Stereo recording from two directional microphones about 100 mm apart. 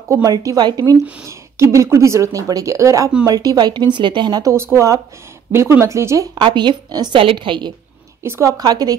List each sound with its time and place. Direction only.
0.1 s speech: 35° right (ahead or behind)
1.2 s speech: 30° right (ahead or behind)
4.6 s speech: 25° right (ahead or behind)
6.3 s speech: 50° right (ahead or behind)
7.2 s speech: 60° right (ahead or behind)
8.2 s speech: 30° right (ahead or behind)